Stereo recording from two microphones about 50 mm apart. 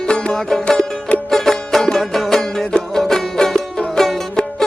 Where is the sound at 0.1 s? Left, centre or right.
Centre.